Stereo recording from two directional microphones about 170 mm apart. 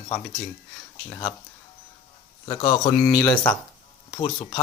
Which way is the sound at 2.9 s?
10° left (ahead or behind).